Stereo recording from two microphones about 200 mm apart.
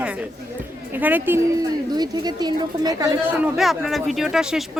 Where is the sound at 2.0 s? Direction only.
20° right (ahead or behind).